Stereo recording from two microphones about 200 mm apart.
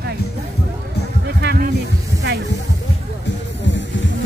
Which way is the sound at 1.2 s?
50° right (ahead or behind).